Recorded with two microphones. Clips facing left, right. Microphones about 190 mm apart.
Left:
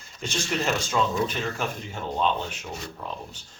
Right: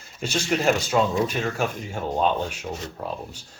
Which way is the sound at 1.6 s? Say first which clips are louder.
Right 4 dB; 45° right (ahead or behind).